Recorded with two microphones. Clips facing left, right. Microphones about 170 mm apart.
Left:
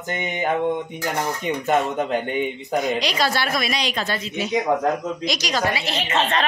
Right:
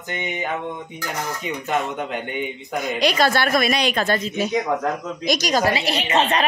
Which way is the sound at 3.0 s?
55° right (ahead or behind).